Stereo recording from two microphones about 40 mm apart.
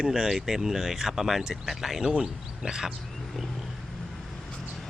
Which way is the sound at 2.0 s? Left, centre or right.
Right.